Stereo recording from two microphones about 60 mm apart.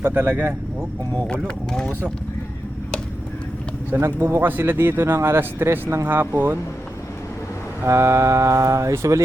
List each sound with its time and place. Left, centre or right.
0.0 s speech: right
1.5 s speech: centre
3.9 s speech: right
7.9 s speech: right